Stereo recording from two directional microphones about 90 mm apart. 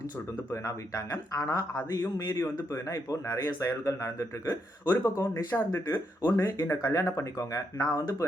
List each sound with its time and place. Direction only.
0.5 s speech: 35° left (ahead or behind)